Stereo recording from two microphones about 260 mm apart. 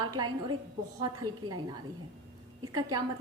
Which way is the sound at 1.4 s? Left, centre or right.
Right.